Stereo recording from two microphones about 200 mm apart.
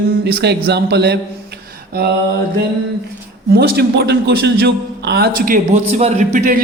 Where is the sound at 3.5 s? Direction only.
55° right (ahead or behind).